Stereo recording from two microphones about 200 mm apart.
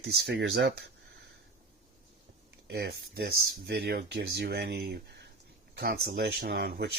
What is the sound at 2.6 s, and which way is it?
Speech, 55° right (ahead or behind).